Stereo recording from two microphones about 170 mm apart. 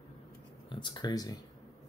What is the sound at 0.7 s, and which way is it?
Speech, 25° left (ahead or behind).